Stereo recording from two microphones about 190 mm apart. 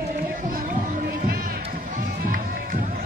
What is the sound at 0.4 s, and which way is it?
Music, 50° right (ahead or behind).